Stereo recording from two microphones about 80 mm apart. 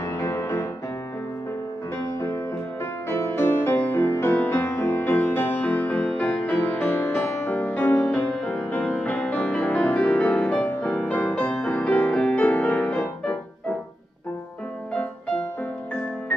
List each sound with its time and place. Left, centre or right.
0.2 s music: left
3.1 s music: left
12.7 s music: centre